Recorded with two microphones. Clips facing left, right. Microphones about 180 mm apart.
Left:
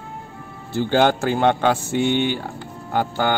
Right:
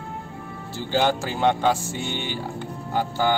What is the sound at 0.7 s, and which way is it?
Speech, 60° left (ahead or behind).